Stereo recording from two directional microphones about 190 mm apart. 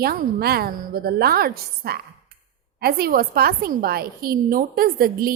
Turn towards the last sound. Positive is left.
turn(degrees=-50)  # may be behind; listen again after turning